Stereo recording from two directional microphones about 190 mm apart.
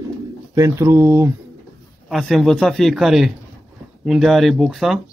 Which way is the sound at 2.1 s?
Centre (ahead or behind).